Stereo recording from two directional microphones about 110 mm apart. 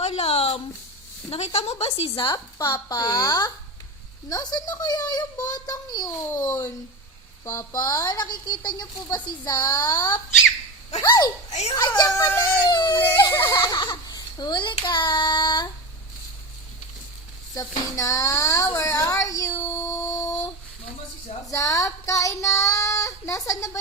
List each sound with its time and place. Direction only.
0.0 s a sound: 65° left (ahead or behind)
1.3 s a woman's voice: 65° left (ahead or behind); by 2.4 s 45° left (ahead or behind)
2.6 s speech: 35° left (ahead or behind)
11.9 s music: 35° left (ahead or behind)
12.6 s speech: 40° left (ahead or behind)
12.9 s a sound: 15° left (ahead or behind)
13.2 s music: 30° left (ahead or behind)
13.6 s a child's voice: 40° left (ahead or behind)
14.8 s child singing: 45° left (ahead or behind)
17.5 s a sound: 30° left (ahead or behind)
21.5 s child singing: 30° left (ahead or behind)